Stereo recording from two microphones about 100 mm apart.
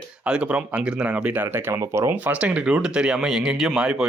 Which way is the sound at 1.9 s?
30° right (ahead or behind).